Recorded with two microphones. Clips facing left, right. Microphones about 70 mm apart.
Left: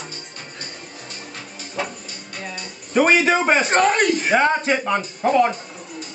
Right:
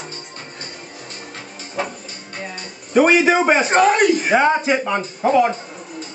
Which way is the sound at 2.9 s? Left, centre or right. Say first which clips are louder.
Right 3 dB; centre.